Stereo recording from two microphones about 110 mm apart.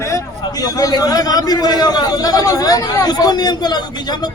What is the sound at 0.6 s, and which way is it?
Speech, 35° left (ahead or behind).